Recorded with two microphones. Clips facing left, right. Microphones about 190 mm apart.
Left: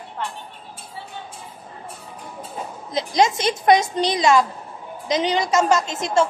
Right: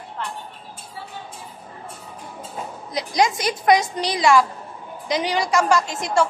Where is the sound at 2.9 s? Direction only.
25° left (ahead or behind).